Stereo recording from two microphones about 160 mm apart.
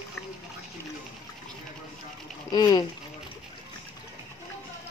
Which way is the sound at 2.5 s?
25° left (ahead or behind).